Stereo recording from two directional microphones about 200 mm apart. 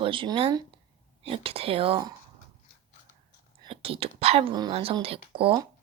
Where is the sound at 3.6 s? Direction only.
25° right (ahead or behind).